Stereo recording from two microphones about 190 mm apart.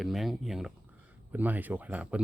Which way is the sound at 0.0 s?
Centre (ahead or behind).